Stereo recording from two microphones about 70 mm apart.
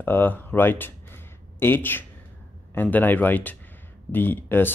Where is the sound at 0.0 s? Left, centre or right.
Left.